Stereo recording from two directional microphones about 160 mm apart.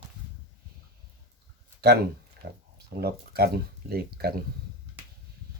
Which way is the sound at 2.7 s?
85° right.